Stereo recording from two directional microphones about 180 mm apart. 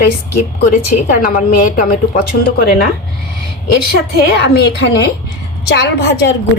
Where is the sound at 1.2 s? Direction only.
50° left (ahead or behind).